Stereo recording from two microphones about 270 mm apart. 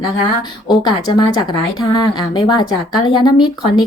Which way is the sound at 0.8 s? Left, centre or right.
Centre.